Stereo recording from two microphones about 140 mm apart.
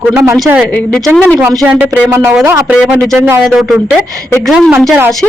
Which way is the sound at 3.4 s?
Centre (ahead or behind).